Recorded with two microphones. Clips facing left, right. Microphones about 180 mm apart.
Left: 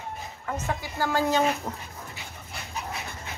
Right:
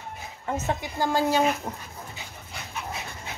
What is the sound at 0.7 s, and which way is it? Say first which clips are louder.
Speech: right 1 dB; 20° right (ahead or behind).